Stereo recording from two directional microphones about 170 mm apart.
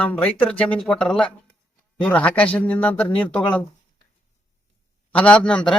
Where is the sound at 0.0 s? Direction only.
10° left (ahead or behind).